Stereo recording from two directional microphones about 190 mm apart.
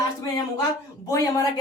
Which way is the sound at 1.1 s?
15° left (ahead or behind).